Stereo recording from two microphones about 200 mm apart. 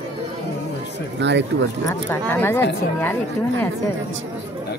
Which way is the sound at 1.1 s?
60° right (ahead or behind).